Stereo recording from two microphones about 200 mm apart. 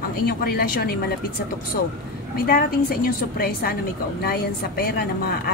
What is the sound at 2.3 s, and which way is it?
A woman's voice, 50° left (ahead or behind).